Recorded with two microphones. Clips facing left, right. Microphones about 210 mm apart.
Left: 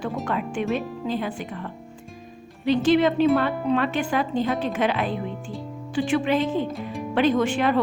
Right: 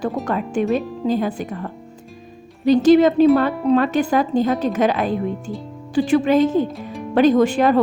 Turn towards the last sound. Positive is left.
turn(degrees=-40)  # may be behind; listen again after turning